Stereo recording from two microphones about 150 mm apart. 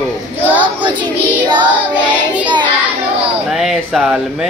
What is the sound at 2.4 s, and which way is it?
Child singing, 30° right (ahead or behind).